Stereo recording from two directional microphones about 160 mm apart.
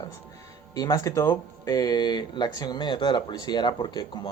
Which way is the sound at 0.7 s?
25° left (ahead or behind).